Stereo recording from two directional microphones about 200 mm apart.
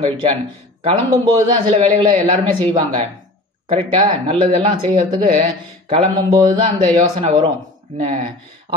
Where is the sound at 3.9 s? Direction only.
25° right (ahead or behind).